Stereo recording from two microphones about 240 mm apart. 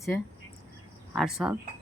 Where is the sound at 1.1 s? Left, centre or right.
Centre.